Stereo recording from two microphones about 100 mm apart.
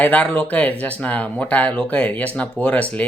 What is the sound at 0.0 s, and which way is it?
Speech, 15° left (ahead or behind).